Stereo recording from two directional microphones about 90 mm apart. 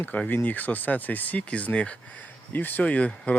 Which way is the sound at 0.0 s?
20° left (ahead or behind).